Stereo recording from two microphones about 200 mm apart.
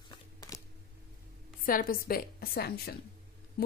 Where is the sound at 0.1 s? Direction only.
20° left (ahead or behind).